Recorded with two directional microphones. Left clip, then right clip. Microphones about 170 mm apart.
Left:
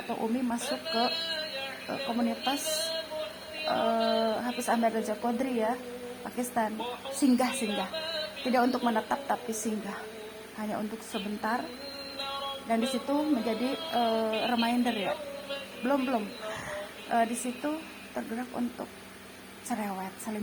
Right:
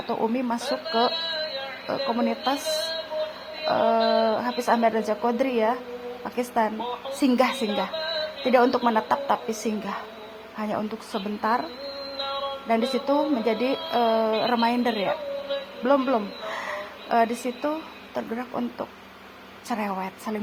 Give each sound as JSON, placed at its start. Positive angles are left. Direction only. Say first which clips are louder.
{"t": 0.1, "sound": "speech", "louder": "right 6 dB", "side_deg": -35}
{"t": 12.6, "sound": "a woman's voice", "louder": "right 7 dB", "side_deg": -30}
{"t": 19.6, "sound": "speech", "louder": "right 6 dB", "side_deg": -30}